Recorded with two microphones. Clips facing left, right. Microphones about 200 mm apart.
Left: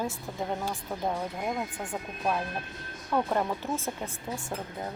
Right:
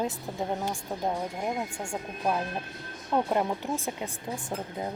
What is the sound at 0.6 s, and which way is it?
Speech, 15° right (ahead or behind).